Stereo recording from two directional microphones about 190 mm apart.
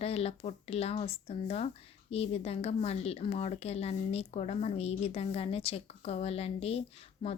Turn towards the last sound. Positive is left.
turn(degrees=30)  # may be behind; listen again after turning